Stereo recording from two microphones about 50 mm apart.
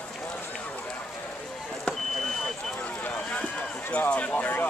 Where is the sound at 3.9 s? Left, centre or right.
Left.